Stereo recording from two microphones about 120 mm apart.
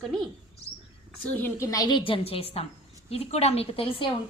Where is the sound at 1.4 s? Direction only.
25° left (ahead or behind).